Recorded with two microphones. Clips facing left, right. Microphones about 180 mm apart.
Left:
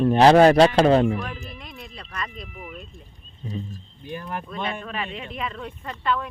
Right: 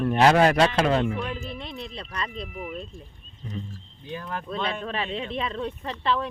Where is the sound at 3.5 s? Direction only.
10° left (ahead or behind).